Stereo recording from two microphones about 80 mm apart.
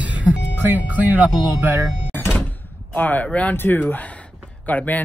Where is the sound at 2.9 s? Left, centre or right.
Left.